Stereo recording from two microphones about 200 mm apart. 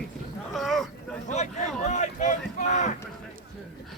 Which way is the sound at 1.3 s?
35° left (ahead or behind).